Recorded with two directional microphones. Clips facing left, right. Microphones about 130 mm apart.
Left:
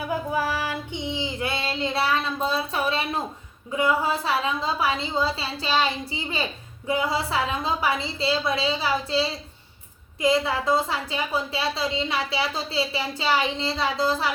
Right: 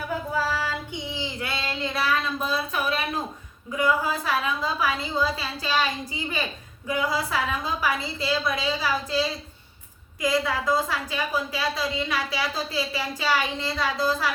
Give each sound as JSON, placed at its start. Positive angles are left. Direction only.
{"t": 0.3, "sound": "child singing", "side_deg": 15}
{"t": 3.7, "sound": "a woman's voice", "side_deg": 25}